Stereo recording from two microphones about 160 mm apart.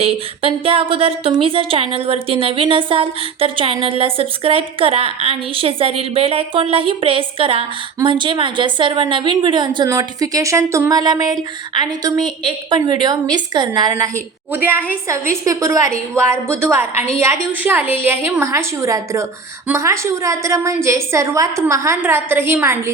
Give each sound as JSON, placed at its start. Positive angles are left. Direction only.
{"t": 0.0, "sound": "a woman's voice", "side_deg": -35}
{"t": 14.5, "sound": "a woman's voice", "side_deg": -10}